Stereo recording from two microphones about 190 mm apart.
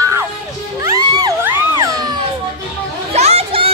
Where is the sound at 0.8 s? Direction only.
20° right (ahead or behind).